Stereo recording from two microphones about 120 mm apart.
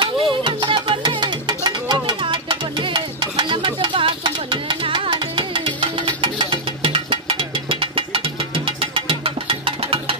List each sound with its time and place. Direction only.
0.0 s music: 40° right (ahead or behind)
1.0 s music: 35° right (ahead or behind)